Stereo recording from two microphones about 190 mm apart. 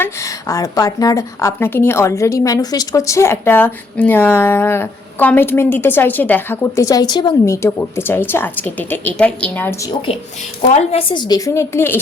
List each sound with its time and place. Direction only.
0.0 s a woman's voice: 15° left (ahead or behind)
10.8 s a woman's voice: 30° left (ahead or behind)